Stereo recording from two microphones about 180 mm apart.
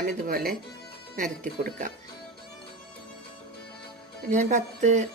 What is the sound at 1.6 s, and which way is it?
Speech, 65° right (ahead or behind).